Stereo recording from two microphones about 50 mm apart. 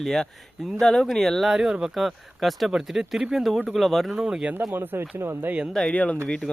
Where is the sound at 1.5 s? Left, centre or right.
Centre.